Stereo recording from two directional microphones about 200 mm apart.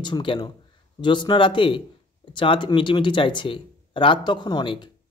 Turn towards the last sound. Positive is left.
turn(degrees=25)  # may be behind; listen again after turning